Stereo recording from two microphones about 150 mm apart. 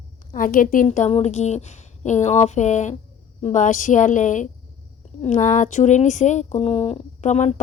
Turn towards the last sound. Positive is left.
turn(degrees=50)  # may be behind; listen again after turning